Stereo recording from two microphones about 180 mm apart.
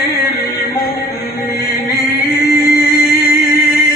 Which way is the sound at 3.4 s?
60° left (ahead or behind).